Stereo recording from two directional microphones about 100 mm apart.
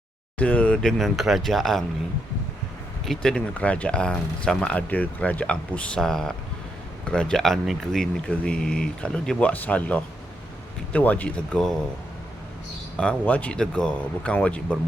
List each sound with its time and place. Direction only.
0.3 s speech: 15° left (ahead or behind)
3.1 s speech: 5° left (ahead or behind)
13.0 s speech: 10° left (ahead or behind)